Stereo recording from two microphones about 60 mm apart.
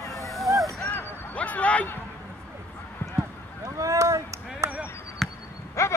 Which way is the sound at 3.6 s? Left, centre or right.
Right.